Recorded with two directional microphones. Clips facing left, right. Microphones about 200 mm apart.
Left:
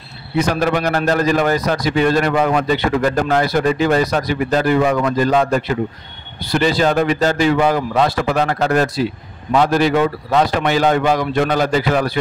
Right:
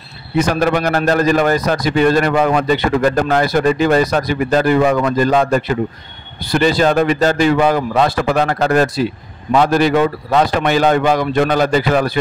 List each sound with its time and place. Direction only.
0.4 s a man's voice: 50° right (ahead or behind)
6.5 s a man's voice: 50° right (ahead or behind)